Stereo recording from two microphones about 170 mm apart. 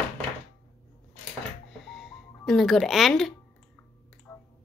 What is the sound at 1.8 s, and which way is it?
Music, centre (ahead or behind).